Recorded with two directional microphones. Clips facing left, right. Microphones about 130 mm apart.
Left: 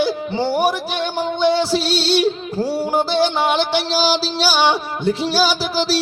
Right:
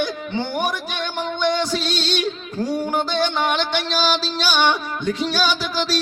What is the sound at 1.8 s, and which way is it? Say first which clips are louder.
Music: left 6 dB; 10° left (ahead or behind).